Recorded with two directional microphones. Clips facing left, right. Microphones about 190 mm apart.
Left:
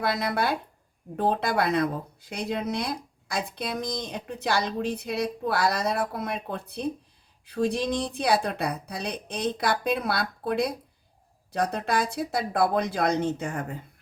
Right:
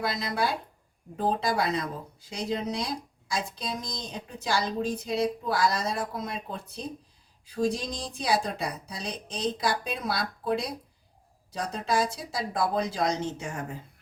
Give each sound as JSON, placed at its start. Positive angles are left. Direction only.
{"t": 0.0, "sound": "speech", "side_deg": 60}